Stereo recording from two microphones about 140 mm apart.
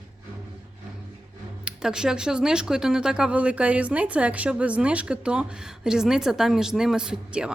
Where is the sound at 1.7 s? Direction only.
5° right (ahead or behind).